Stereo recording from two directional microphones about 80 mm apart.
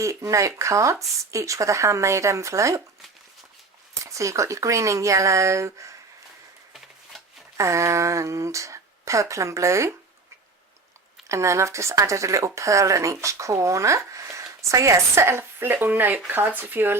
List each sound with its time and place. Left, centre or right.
0.0 s speech: right
4.0 s speech: right
7.5 s speech: right
11.3 s speech: right